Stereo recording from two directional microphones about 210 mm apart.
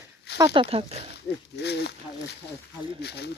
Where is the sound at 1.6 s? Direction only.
55° left (ahead or behind).